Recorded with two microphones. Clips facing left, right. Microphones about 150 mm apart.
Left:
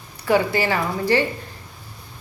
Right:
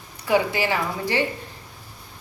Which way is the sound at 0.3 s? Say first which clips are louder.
Left 2 dB; 15° right (ahead or behind).